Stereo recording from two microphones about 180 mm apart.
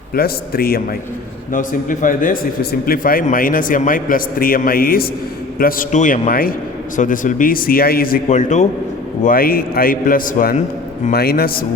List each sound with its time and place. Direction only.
0.1 s speech: 55° left (ahead or behind)
1.5 s a man's voice: 45° left (ahead or behind)
9.2 s a man's voice: 55° left (ahead or behind)